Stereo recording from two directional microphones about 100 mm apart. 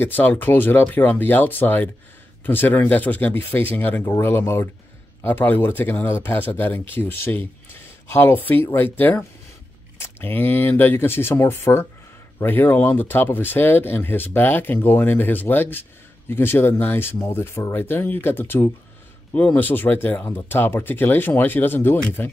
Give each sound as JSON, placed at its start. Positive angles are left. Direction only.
{"t": 0.0, "sound": "speech", "side_deg": 20}